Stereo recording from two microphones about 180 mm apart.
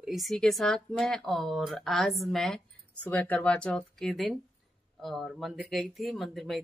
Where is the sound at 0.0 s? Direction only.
Centre (ahead or behind).